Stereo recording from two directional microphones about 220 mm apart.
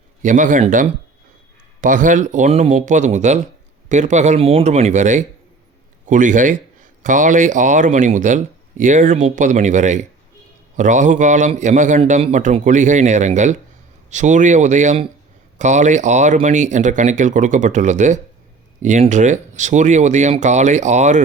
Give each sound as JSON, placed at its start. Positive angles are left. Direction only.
{"t": 0.2, "sound": "speech", "side_deg": -35}